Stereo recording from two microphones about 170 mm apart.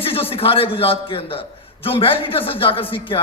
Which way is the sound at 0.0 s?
35° left (ahead or behind).